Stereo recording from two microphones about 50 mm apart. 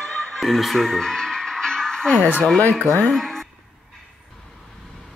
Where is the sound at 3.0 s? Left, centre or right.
Centre.